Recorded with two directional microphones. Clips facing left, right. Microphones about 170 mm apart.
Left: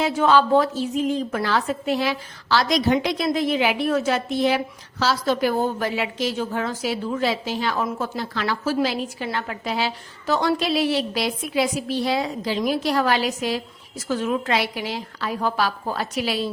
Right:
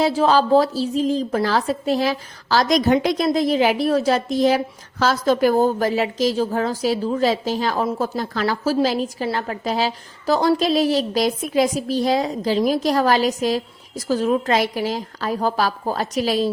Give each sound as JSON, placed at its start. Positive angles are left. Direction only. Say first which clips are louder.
{"t": 0.0, "sound": "a woman's voice", "louder": "right 2 dB", "side_deg": -35}